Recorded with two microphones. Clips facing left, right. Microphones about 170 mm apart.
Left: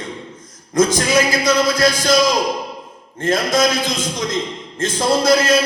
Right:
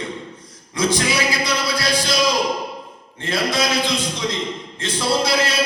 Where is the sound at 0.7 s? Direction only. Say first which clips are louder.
Left 5 dB; 45° left (ahead or behind).